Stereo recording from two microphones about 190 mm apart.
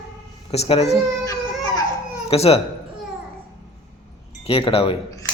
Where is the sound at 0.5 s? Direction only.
35° left (ahead or behind).